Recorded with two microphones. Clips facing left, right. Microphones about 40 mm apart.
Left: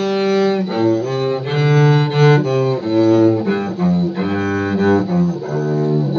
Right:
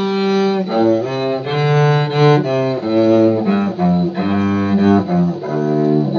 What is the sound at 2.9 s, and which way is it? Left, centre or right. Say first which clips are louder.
Bowed string instrument: even; centre.